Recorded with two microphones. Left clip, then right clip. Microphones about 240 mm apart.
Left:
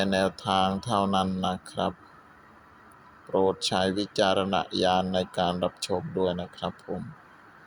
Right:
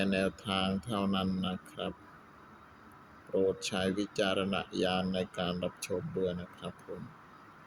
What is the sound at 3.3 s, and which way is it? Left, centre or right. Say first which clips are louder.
Speech: left 7 dB; left.